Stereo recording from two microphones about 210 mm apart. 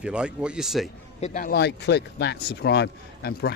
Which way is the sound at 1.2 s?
35° left (ahead or behind).